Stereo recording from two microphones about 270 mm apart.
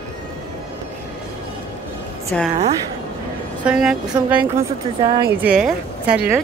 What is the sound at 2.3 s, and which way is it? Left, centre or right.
Speech, centre.